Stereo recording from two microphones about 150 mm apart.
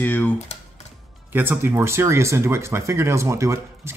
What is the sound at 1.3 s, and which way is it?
Speech, 15° right (ahead or behind).